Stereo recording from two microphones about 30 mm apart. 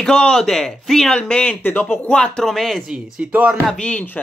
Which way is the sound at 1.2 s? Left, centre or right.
Left.